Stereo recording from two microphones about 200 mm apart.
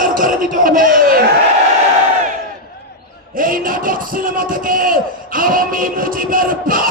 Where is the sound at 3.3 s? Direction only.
45° right (ahead or behind).